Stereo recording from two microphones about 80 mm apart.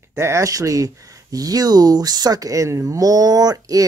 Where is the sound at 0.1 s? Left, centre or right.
Right.